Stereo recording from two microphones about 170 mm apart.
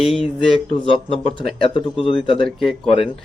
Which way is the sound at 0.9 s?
35° left (ahead or behind).